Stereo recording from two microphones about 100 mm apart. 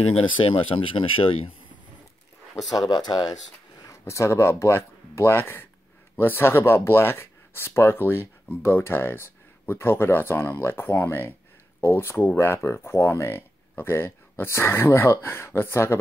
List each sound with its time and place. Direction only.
0.1 s speech: 65° left (ahead or behind)
2.9 s speech: 45° left (ahead or behind)
3.8 s speech: 30° left (ahead or behind)